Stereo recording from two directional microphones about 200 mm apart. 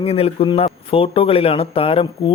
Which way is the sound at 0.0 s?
30° left (ahead or behind).